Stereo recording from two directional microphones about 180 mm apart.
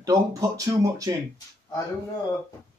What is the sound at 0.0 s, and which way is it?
Speech, 20° right (ahead or behind).